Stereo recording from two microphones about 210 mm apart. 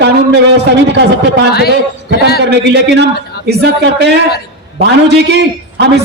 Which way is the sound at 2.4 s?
55° right (ahead or behind).